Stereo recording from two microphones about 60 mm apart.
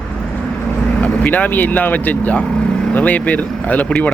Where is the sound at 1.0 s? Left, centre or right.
Left.